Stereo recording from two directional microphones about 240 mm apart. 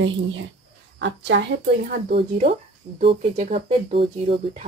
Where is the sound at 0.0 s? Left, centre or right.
Right.